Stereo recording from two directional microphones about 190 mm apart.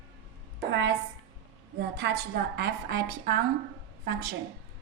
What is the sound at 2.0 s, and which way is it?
A woman's voice, 65° right (ahead or behind).